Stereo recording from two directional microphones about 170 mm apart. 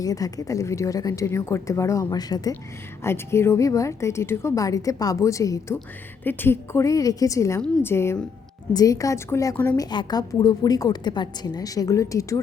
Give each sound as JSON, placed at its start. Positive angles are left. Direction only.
{"t": 0.0, "sound": "a woman's voice", "side_deg": 20}